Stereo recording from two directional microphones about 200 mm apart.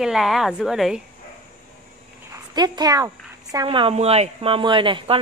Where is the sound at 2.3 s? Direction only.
20° right (ahead or behind).